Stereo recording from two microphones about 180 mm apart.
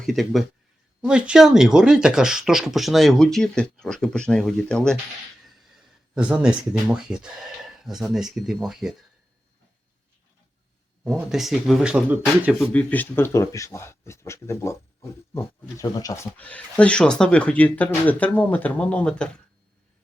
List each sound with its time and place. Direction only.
0.0 s speech: centre (ahead or behind)
11.0 s speech: centre (ahead or behind)
12.5 s speech: 10° left (ahead or behind)
16.4 s speech: 10° left (ahead or behind)